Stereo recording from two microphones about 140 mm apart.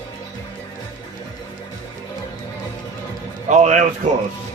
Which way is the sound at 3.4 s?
55° right (ahead or behind).